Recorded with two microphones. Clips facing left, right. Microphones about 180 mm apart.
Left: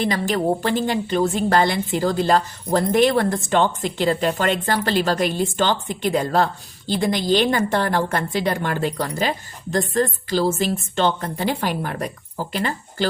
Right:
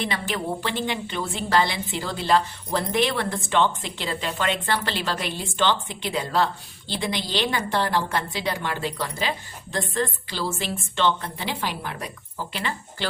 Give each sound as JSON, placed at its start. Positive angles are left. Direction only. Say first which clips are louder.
{"t": 0.0, "sound": "a woman's voice", "louder": "left 7 dB", "side_deg": 40}